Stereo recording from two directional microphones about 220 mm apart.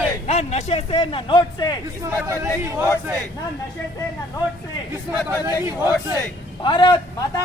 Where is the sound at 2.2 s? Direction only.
15° right (ahead or behind).